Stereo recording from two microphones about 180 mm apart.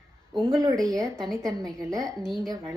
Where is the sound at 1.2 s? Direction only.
5° left (ahead or behind).